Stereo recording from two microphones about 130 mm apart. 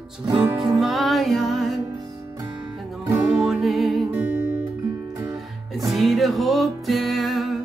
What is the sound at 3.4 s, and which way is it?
Music, centre (ahead or behind).